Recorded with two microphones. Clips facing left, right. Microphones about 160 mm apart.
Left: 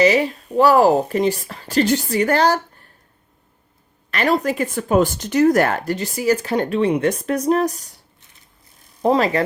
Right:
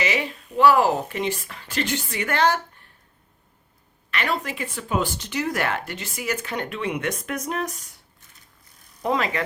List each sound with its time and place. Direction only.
0.0 s speech: 40° left (ahead or behind)
4.1 s speech: 40° left (ahead or behind)
9.0 s speech: 35° left (ahead or behind)